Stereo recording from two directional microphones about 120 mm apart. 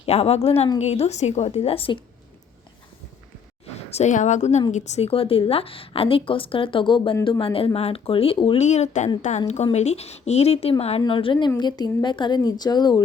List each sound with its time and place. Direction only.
0.0 s speech: 55° left (ahead or behind)
3.8 s a woman's voice: 65° left (ahead or behind); by 8.5 s 45° left (ahead or behind)
8.5 s a woman's voice: 70° left (ahead or behind)
9.2 s a woman's voice: 90° left
9.7 s speech: 65° left (ahead or behind)
11.0 s a woman's voice: 45° left (ahead or behind)